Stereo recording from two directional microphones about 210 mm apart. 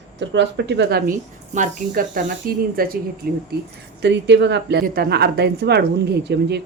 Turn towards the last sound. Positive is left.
turn(degrees=-55)  # may be behind; listen again after turning